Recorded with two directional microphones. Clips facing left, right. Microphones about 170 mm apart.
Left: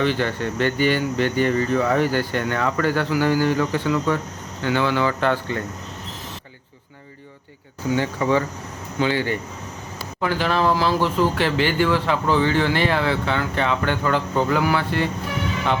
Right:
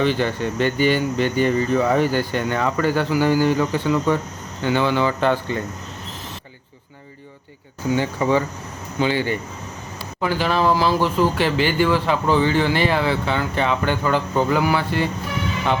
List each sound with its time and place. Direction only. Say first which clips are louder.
0.0 s speech: right 2 dB; 15° right (ahead or behind)
7.9 s speech: right 1 dB; 20° right (ahead or behind)
10.2 s speech: right 1 dB; 5° right (ahead or behind)